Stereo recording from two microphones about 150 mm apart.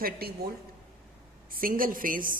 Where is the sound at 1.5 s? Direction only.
70° right (ahead or behind).